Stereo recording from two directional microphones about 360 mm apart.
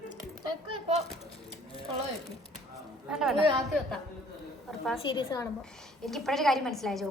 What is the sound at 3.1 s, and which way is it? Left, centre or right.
Speech, centre.